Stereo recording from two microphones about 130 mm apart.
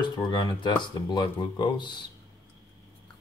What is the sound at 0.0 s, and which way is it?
Speech, 35° left (ahead or behind).